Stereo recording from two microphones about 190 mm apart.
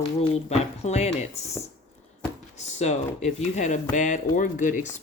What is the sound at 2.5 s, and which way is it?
Speech, 40° left (ahead or behind).